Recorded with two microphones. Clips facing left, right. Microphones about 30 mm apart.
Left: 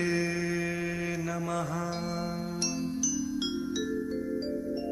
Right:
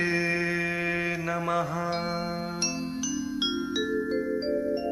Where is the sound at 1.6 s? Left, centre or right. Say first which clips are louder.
Right 3 dB; right.